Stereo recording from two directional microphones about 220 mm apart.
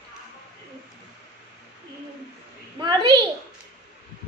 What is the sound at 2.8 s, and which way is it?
Speech, 20° right (ahead or behind).